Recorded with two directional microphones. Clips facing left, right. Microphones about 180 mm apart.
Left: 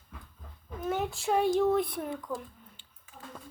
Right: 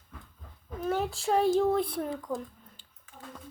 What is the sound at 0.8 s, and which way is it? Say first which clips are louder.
Speech: right 2 dB; 35° right (ahead or behind).